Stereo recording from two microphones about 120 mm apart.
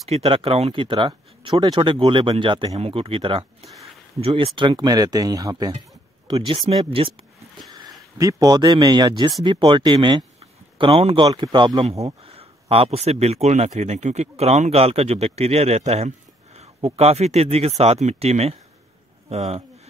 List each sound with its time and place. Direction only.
0.1 s speech: 50° right (ahead or behind)
2.7 s speech: 55° right (ahead or behind); by 5.7 s 30° right (ahead or behind)
6.2 s speech: 50° right (ahead or behind)
7.7 s speech: 30° right (ahead or behind)
10.8 s speech: 55° right (ahead or behind)
11.2 s speech: 35° right (ahead or behind)
12.0 s speech: 55° right (ahead or behind)